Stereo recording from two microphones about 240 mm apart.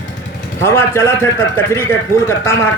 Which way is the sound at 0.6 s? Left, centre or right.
Centre.